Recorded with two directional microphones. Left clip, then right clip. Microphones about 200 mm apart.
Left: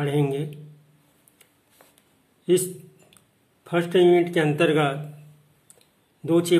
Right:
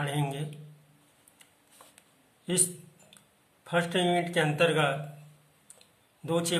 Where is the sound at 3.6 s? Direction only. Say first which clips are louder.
Left 8 dB; 30° left (ahead or behind).